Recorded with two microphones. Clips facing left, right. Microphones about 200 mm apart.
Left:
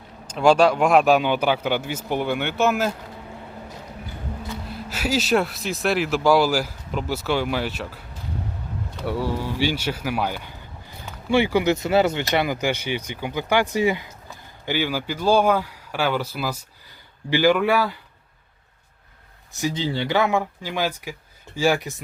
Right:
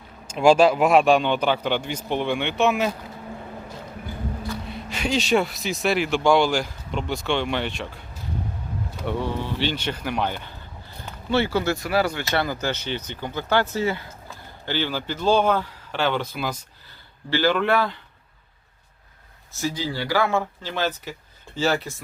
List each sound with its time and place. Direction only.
0.3 s speech: 10° right (ahead or behind)
4.6 s speech: 5° left (ahead or behind)
9.0 s speech: 5° left (ahead or behind)
19.5 s speech: 20° left (ahead or behind)